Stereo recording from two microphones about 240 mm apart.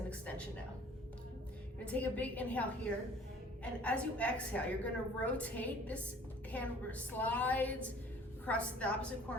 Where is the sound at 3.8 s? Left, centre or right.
Centre.